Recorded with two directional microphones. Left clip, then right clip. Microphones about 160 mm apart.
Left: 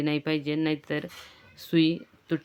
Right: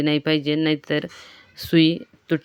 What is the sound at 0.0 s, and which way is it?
Speech, 35° right (ahead or behind).